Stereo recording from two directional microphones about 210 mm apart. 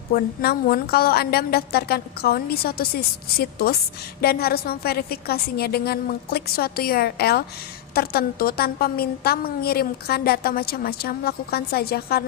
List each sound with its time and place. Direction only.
0.1 s a woman's voice: 45° left (ahead or behind)